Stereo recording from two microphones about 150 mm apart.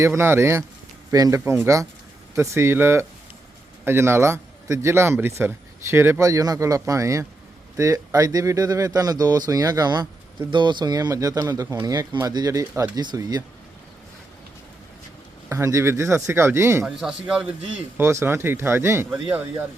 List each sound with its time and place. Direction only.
0.0 s speech: 15° right (ahead or behind)
15.4 s speech: 20° right (ahead or behind)
16.8 s speech: 5° right (ahead or behind)
17.9 s speech: 15° right (ahead or behind)